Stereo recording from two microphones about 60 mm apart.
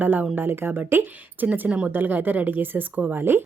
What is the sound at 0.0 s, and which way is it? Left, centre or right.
Speech, right.